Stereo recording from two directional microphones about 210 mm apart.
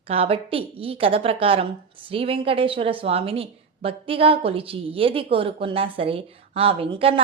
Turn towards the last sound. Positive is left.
turn(degrees=-25)  # may be behind; listen again after turning